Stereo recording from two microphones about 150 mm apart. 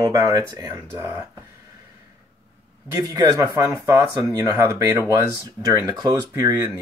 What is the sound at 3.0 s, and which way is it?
Speech, 20° right (ahead or behind).